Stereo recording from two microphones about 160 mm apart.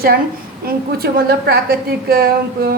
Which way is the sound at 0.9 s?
75° right (ahead or behind).